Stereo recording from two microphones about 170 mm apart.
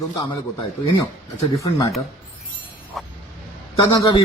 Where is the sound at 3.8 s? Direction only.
30° left (ahead or behind).